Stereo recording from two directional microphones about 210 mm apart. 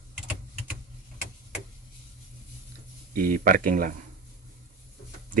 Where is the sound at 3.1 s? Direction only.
40° right (ahead or behind).